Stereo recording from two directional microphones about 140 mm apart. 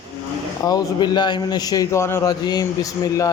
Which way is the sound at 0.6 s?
25° left (ahead or behind).